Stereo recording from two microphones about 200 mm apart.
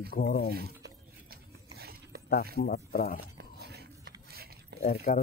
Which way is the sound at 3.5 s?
55° right (ahead or behind).